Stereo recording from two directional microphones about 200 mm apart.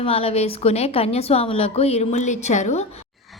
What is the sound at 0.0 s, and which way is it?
A woman's voice, 30° left (ahead or behind).